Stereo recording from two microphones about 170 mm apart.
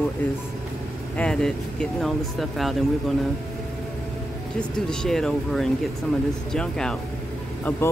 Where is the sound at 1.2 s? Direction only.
5° left (ahead or behind).